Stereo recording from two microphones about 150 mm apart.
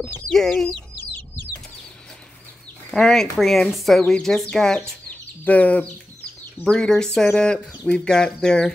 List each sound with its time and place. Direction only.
0.3 s a woman's voice: 5° left (ahead or behind)
2.9 s a woman's voice: 5° left (ahead or behind)